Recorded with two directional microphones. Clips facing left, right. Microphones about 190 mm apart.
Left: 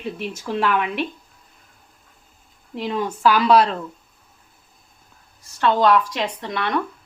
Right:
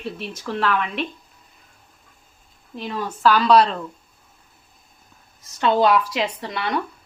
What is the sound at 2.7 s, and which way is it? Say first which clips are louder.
Speech: left 4 dB; 20° left (ahead or behind).